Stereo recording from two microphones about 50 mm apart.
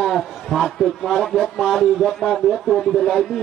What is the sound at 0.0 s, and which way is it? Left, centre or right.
Speech, centre.